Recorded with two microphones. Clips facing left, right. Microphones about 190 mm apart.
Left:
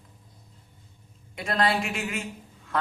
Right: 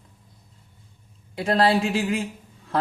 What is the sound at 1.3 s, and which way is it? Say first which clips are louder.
Speech: right 6 dB; 35° right (ahead or behind).